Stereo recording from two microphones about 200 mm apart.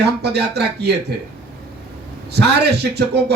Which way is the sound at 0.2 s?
55° right (ahead or behind).